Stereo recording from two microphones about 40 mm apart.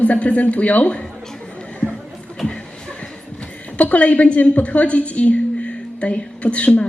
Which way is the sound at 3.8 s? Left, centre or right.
Left.